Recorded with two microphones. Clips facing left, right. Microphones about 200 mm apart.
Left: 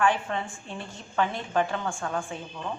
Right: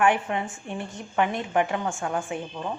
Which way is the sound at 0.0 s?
15° right (ahead or behind).